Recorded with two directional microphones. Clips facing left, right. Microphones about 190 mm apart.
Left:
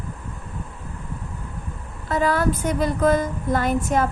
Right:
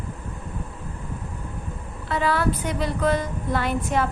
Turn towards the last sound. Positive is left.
turn(degrees=45)  # may be behind; listen again after turning